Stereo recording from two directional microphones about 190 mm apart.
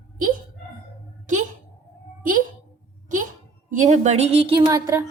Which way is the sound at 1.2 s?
40° right (ahead or behind).